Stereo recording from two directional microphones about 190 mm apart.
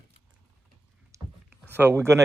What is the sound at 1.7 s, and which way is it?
Speech, 10° right (ahead or behind).